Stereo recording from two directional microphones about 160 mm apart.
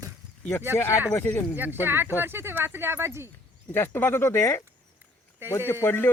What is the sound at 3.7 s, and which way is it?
Speech, 15° left (ahead or behind).